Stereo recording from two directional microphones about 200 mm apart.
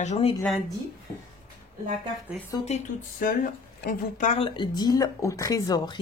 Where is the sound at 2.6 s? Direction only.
40° left (ahead or behind).